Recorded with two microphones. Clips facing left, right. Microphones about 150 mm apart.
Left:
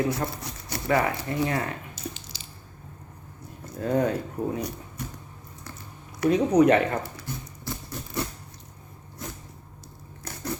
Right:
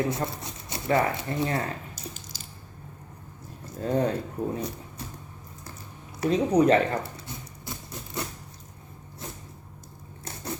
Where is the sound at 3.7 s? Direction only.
30° right (ahead or behind).